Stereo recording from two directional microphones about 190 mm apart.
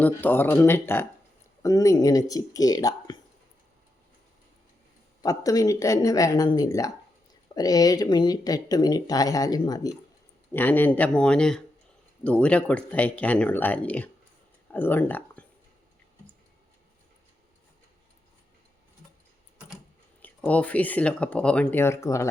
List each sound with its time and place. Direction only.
0.0 s speech: 10° left (ahead or behind)
5.2 s speech: 20° left (ahead or behind)
10.5 s speech: 10° left (ahead or behind)
20.2 s speech: 10° left (ahead or behind)